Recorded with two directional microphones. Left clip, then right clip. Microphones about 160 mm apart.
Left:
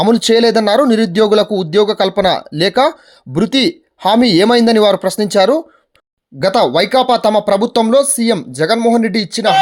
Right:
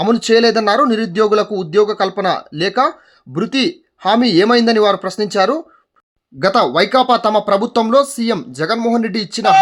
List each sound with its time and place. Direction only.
0.0 s speech: 25° left (ahead or behind)